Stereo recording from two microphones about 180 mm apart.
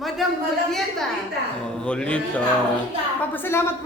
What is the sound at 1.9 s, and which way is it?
Speech, 5° left (ahead or behind).